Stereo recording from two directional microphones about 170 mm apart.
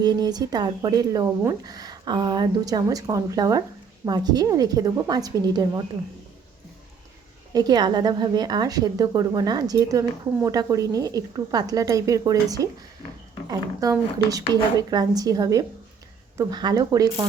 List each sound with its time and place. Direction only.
0.0 s a woman's voice: 25° right (ahead or behind)
7.5 s a woman's voice: 25° right (ahead or behind)